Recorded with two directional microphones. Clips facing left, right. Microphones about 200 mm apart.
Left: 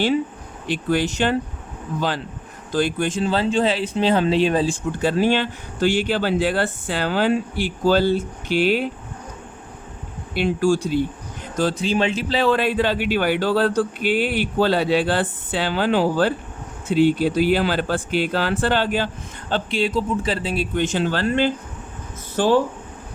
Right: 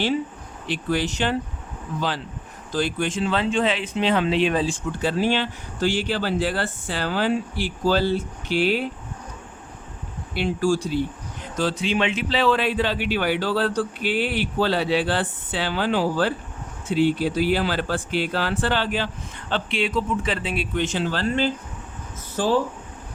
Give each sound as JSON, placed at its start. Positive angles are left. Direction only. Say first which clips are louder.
{"t": 0.7, "sound": "speech", "louder": "left 3 dB", "side_deg": 50}
{"t": 10.3, "sound": "speech", "louder": "left 3 dB", "side_deg": 50}